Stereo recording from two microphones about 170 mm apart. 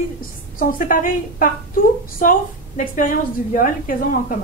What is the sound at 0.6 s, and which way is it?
Speech, 55° left (ahead or behind).